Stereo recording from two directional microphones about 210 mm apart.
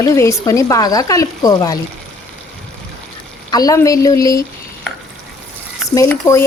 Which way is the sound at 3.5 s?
15° left (ahead or behind).